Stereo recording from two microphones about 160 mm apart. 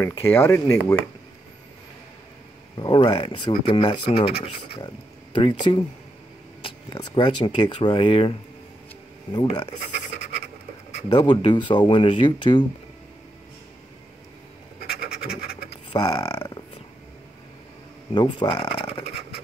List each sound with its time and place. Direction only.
0.0 s speech: 15° left (ahead or behind)
2.8 s speech: 30° left (ahead or behind)
11.1 s speech: 30° left (ahead or behind)
15.9 s speech: 25° left (ahead or behind)
18.1 s speech: 30° left (ahead or behind)